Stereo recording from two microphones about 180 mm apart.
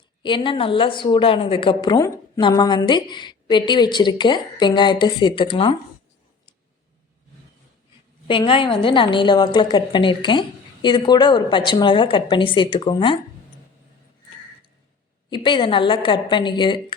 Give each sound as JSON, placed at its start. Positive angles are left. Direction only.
{"t": 0.2, "sound": "a woman's voice", "side_deg": 25}
{"t": 8.3, "sound": "a woman's voice", "side_deg": 30}
{"t": 15.3, "sound": "a woman's voice", "side_deg": 25}